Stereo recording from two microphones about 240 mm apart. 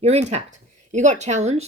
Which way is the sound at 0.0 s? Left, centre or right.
Right.